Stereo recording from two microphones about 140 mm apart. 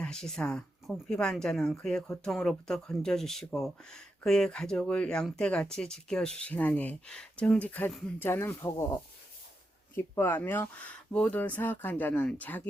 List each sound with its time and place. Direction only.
0.0 s speech: 5° left (ahead or behind)